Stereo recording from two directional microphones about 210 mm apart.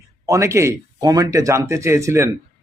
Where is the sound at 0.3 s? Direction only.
15° right (ahead or behind).